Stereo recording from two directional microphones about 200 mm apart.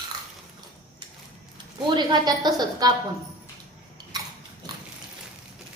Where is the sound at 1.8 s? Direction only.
20° right (ahead or behind).